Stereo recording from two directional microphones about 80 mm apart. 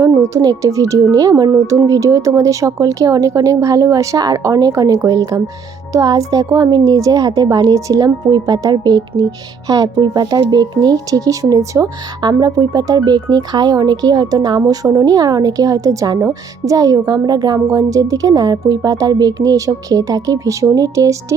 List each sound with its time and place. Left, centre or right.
0.0 s a woman's voice: right
17.7 s a woman's voice: right